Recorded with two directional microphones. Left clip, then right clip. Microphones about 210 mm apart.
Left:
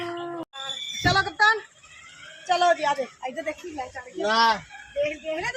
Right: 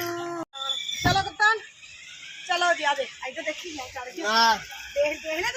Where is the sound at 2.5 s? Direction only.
40° left (ahead or behind).